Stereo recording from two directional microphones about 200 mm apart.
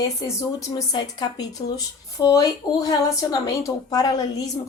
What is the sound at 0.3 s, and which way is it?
A woman's voice, 20° left (ahead or behind).